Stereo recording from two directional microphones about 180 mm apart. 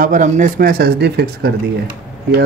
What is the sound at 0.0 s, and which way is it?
Speech, 45° right (ahead or behind).